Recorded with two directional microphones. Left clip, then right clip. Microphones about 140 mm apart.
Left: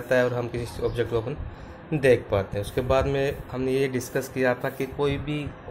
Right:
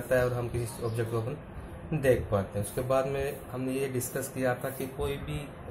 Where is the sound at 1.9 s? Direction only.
40° left (ahead or behind).